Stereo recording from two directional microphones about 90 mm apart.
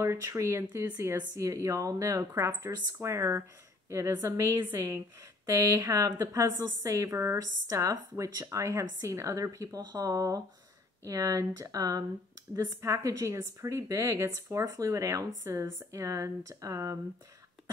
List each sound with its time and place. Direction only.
0.0 s a woman's voice: 30° right (ahead or behind)
5.5 s a woman's voice: 35° right (ahead or behind)